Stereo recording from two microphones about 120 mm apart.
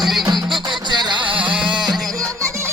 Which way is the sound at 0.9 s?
40° right (ahead or behind).